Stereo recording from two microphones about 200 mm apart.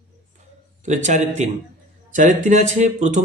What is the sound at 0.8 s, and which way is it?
A man's voice, 35° right (ahead or behind).